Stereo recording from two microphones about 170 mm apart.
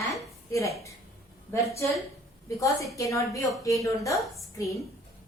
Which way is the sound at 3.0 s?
20° left (ahead or behind).